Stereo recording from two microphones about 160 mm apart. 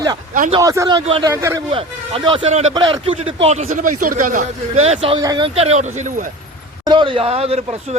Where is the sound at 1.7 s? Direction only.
35° right (ahead or behind); by 4.4 s 55° right (ahead or behind).